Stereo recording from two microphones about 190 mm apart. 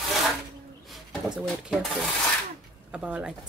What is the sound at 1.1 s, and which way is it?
Speech, 5° right (ahead or behind).